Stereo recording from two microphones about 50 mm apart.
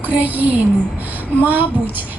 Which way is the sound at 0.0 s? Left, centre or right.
Right.